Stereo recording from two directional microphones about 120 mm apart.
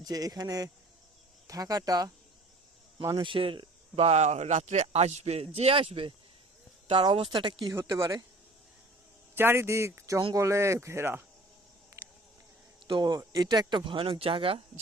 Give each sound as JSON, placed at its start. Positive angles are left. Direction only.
{"t": 0.0, "sound": "speech", "side_deg": -30}
{"t": 3.2, "sound": "speech", "side_deg": -45}
{"t": 3.9, "sound": "a man's voice", "side_deg": -65}
{"t": 5.5, "sound": "speech", "side_deg": -55}
{"t": 7.7, "sound": "a man's voice", "side_deg": -25}
{"t": 9.3, "sound": "a man's voice", "side_deg": -20}
{"t": 12.9, "sound": "speech", "side_deg": -35}